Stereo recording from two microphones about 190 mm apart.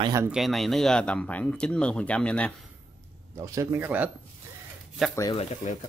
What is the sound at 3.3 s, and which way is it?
Speech, 15° right (ahead or behind).